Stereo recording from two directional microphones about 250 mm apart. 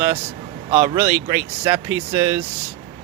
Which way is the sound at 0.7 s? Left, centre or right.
Centre.